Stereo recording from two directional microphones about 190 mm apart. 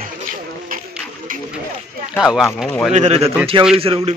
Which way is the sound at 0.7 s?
45° right (ahead or behind).